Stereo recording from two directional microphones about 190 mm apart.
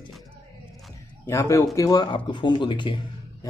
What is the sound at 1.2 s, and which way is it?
Speech, 20° left (ahead or behind).